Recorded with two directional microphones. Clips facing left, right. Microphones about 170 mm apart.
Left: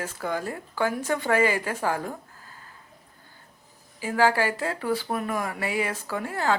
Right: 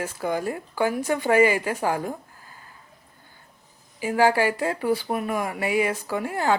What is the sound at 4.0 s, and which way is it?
Speech, 15° right (ahead or behind).